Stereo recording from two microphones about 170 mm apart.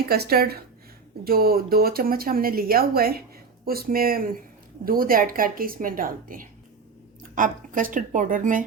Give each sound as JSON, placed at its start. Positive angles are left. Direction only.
{"t": 0.0, "sound": "speech", "side_deg": -65}